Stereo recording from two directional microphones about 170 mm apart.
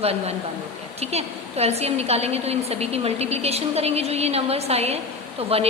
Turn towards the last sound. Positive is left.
turn(degrees=-35)  # may be behind; listen again after turning